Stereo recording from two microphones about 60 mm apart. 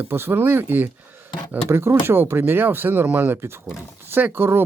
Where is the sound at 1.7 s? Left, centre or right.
Right.